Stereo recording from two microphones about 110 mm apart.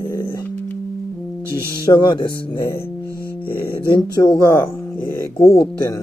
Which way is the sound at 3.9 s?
40° left (ahead or behind).